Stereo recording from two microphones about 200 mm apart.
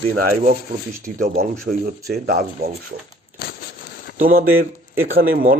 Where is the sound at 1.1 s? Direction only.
40° right (ahead or behind).